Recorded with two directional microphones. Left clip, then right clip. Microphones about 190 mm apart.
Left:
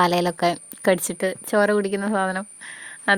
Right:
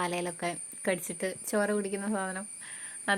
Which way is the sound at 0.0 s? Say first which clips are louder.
Left 13 dB; 55° left (ahead or behind).